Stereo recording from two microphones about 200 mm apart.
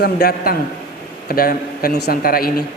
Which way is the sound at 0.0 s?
50° left (ahead or behind).